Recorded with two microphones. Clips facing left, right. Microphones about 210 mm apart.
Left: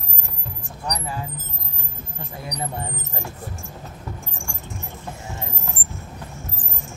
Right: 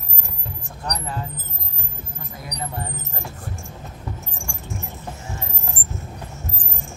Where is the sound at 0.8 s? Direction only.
10° left (ahead or behind).